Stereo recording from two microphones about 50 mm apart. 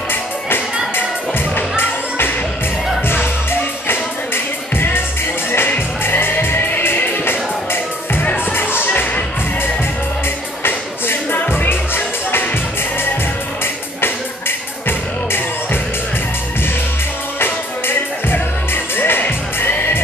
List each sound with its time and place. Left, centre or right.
1.5 s music: left
4.7 s music: left
11.3 s music: left
14.9 s music: left
17.4 s music: left
19.2 s music: left